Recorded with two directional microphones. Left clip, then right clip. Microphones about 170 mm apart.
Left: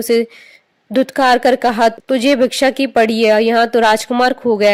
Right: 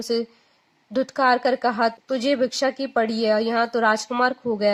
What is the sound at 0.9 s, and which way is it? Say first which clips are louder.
Speech: left 7 dB; 35° left (ahead or behind).